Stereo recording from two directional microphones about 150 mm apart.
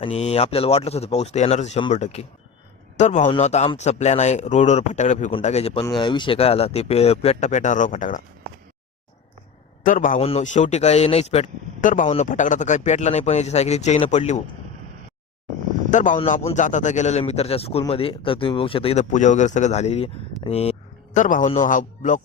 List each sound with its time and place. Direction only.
0.0 s speech: 45° left (ahead or behind)
5.8 s speech: 30° left (ahead or behind); by 8.2 s 60° left (ahead or behind)
9.8 s speech: 60° left (ahead or behind)
10.2 s speech: 40° left (ahead or behind)
11.8 s speech: 60° left (ahead or behind)
15.9 s a man's voice: 55° left (ahead or behind); by 19.0 s 40° left (ahead or behind)
19.1 s speech: 55° left (ahead or behind)